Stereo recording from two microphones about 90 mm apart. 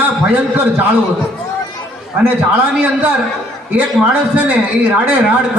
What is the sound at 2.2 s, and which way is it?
Speech, 15° right (ahead or behind).